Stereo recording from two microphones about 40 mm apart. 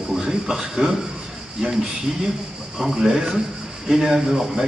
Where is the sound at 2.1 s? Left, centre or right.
Centre.